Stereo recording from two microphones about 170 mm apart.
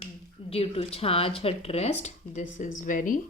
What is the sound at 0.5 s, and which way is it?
A woman's voice, 35° left (ahead or behind).